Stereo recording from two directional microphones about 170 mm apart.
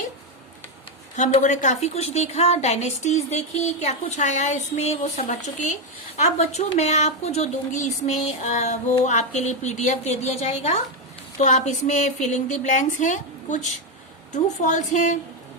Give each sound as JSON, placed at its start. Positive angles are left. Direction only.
{"t": 1.1, "sound": "a woman's voice", "side_deg": 45}